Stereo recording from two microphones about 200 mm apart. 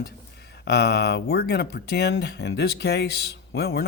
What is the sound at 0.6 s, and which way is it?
Speech, 55° left (ahead or behind).